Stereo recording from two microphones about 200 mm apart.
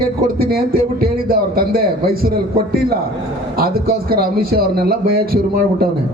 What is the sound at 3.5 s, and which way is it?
A man's voice, 50° right (ahead or behind).